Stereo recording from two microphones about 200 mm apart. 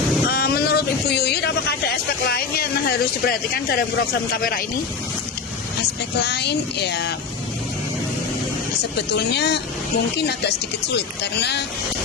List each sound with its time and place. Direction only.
0.3 s a sound: 50° left (ahead or behind)
2.2 s speech: 50° left (ahead or behind)
6.2 s speech: 55° left (ahead or behind)
8.8 s speech: 55° left (ahead or behind)
10.8 s speech: 55° left (ahead or behind)